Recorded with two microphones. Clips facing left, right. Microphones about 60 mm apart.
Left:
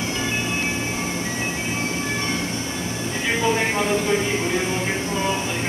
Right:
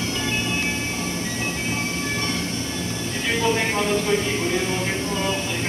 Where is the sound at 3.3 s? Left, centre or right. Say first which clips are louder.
Even; centre.